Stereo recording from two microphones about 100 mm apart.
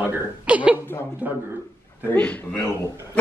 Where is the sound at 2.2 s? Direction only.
15° left (ahead or behind).